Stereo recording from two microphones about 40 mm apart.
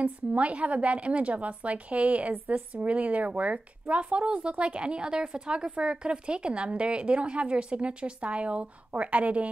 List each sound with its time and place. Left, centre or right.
0.0 s a woman's voice: right